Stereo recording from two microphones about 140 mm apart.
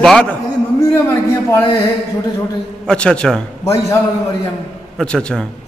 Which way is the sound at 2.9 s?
5° left (ahead or behind).